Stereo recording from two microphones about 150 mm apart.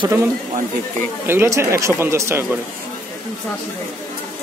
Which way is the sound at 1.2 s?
15° right (ahead or behind).